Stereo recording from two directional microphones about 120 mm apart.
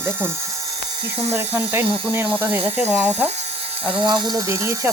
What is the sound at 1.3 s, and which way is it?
Speech, 15° right (ahead or behind).